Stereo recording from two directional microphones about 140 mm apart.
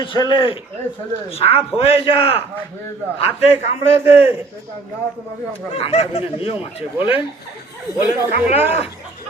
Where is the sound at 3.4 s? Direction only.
45° left (ahead or behind).